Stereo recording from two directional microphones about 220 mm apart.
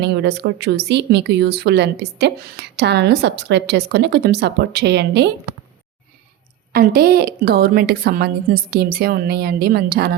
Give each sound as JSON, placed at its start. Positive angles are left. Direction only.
{"t": 0.0, "sound": "speech", "side_deg": -50}
{"t": 6.7, "sound": "speech", "side_deg": -45}